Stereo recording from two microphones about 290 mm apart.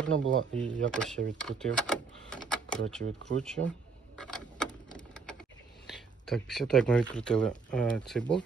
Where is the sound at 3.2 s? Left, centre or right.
Centre.